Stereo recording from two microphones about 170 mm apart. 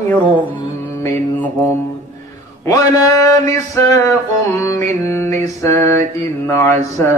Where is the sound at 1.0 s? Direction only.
20° left (ahead or behind).